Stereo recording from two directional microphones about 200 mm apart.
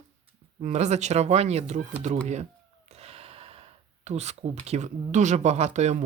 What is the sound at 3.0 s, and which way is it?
Gasp, 30° right (ahead or behind).